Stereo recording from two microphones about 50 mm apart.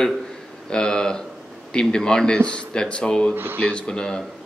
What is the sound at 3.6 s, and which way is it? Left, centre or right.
Speech, centre.